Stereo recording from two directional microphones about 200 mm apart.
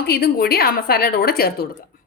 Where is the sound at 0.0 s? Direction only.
50° left (ahead or behind).